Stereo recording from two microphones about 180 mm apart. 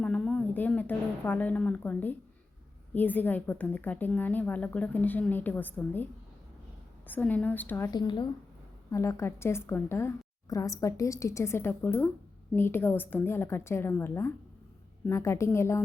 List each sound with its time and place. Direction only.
0.0 s a woman's voice: 5° left (ahead or behind)
7.1 s a woman's voice: 10° left (ahead or behind)
7.9 s a woman's voice: 25° left (ahead or behind)